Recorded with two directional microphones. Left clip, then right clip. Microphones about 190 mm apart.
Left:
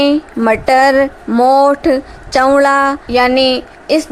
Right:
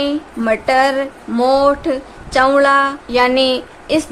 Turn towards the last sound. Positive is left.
turn(degrees=20)  # may be behind; listen again after turning